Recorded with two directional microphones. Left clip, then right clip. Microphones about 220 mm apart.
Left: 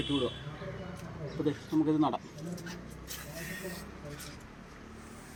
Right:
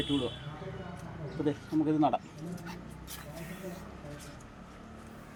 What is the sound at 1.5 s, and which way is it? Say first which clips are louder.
Speech: even; 5° right (ahead or behind).